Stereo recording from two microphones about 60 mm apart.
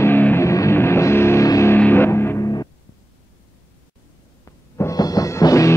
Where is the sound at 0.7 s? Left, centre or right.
Left.